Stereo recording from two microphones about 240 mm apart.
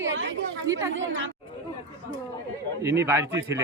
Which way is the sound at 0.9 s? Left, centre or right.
Right.